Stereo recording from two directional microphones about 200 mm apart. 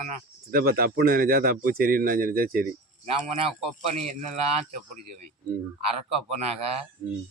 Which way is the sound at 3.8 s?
35° right (ahead or behind).